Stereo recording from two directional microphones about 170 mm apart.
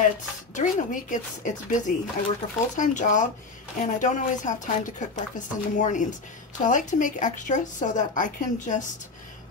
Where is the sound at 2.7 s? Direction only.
45° left (ahead or behind).